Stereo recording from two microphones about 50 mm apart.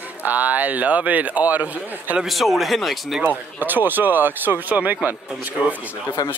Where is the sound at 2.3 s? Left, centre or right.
Centre.